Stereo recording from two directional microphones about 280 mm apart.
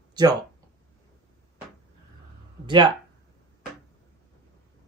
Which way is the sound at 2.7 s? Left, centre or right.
Centre.